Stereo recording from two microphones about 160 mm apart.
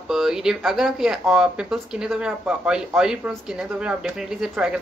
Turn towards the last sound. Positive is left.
turn(degrees=-5)  # may be behind; listen again after turning